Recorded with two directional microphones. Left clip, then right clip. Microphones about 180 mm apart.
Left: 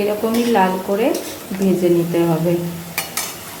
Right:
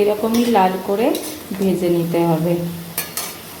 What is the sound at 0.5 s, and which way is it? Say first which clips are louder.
A woman's voice: right 1 dB; 5° right (ahead or behind).